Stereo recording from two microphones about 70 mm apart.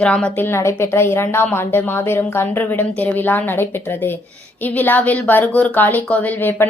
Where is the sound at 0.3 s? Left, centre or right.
Left.